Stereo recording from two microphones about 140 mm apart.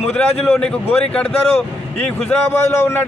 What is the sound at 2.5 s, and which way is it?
Speech, 20° left (ahead or behind).